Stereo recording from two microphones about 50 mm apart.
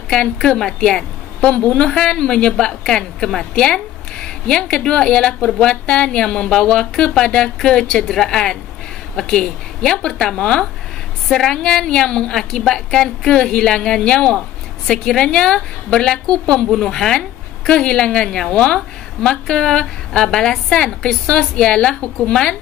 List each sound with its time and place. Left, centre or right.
0.1 s a woman's voice: centre